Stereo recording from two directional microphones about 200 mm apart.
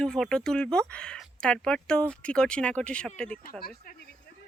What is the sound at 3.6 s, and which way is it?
Speech, 50° left (ahead or behind).